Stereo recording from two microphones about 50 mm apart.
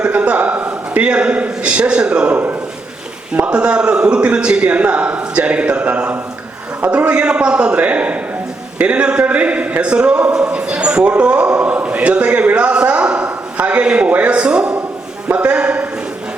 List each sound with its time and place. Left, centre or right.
0.0 s a man's voice: right
3.4 s a man's voice: right
15.3 s a man's voice: right